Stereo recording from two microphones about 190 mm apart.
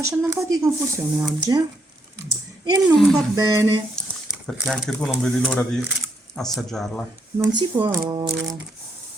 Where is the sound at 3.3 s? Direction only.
15° right (ahead or behind).